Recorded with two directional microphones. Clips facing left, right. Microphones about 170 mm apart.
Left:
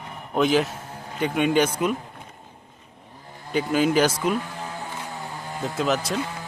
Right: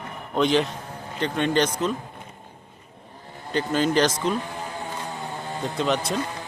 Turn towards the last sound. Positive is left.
turn(degrees=5)  # may be behind; listen again after turning